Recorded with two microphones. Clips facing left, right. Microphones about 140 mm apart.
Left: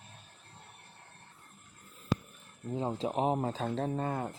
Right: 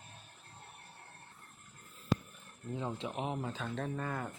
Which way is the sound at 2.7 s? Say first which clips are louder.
Left 6 dB; 35° left (ahead or behind).